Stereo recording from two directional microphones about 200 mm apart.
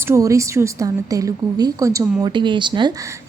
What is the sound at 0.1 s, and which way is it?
A woman's voice, 15° right (ahead or behind).